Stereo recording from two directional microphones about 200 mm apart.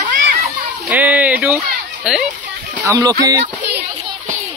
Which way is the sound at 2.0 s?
5° right (ahead or behind).